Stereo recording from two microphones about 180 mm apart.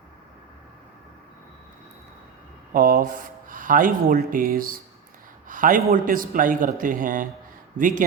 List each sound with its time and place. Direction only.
2.7 s speech: 50° right (ahead or behind)